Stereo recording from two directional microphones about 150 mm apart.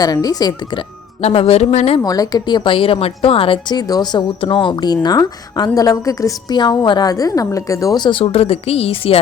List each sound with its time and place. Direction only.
0.0 s a woman's voice: 25° left (ahead or behind)
1.2 s speech: 40° left (ahead or behind)
2.0 s a woman's voice: 25° left (ahead or behind); by 9.2 s 40° left (ahead or behind)